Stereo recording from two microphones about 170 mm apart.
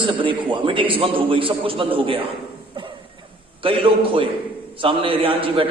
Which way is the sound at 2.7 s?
30° right (ahead or behind).